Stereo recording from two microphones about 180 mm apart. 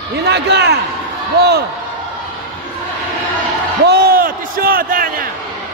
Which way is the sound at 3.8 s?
60° right (ahead or behind).